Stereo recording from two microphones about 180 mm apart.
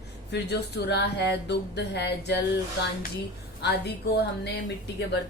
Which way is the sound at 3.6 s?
65° left (ahead or behind).